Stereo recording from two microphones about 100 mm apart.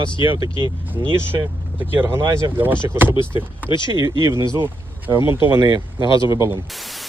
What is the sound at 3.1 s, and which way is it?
Speech, 55° left (ahead or behind).